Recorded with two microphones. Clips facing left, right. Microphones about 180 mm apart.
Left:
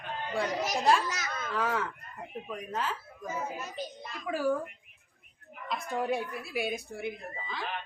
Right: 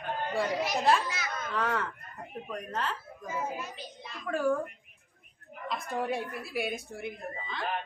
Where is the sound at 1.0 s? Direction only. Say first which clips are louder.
Even; 40° left (ahead or behind).